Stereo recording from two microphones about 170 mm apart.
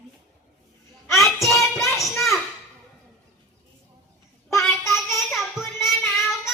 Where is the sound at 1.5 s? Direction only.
15° left (ahead or behind).